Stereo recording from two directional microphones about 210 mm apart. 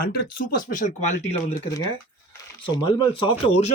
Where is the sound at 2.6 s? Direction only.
25° left (ahead or behind).